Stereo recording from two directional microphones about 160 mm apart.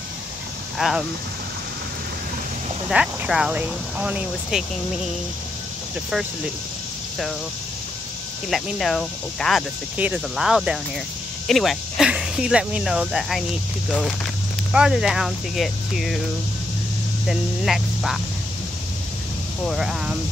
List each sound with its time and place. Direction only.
0.7 s speech: centre (ahead or behind)
2.9 s speech: 5° right (ahead or behind)
8.5 s speech: centre (ahead or behind)
14.7 s speech: 5° right (ahead or behind)
17.3 s speech: centre (ahead or behind)
19.6 s speech: centre (ahead or behind)